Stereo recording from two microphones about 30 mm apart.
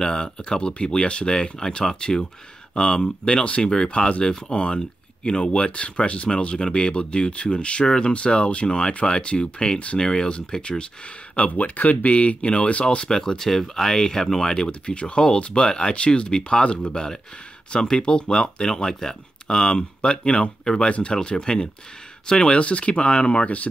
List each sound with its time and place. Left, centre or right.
0.0 s speech: left
9.9 s speech: left
11.5 s speech: left
13.1 s speech: centre
14.5 s speech: left
22.6 s speech: left